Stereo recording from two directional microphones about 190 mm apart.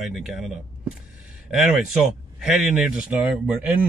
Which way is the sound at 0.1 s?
5° right (ahead or behind).